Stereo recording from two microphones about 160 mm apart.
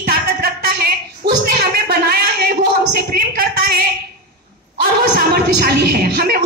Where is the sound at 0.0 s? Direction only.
70° right (ahead or behind).